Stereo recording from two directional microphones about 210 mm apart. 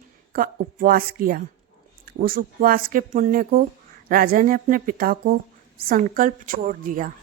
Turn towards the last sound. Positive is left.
turn(degrees=-40)  # may be behind; listen again after turning